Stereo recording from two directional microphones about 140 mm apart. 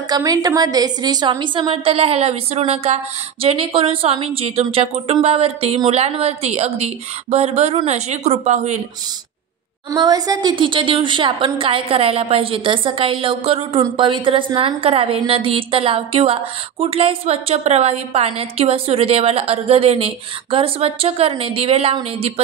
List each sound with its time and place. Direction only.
0.1 s a woman's voice: 30° right (ahead or behind); by 8.8 s 55° right (ahead or behind)
9.9 s a woman's voice: 25° right (ahead or behind); by 21.9 s 45° right (ahead or behind)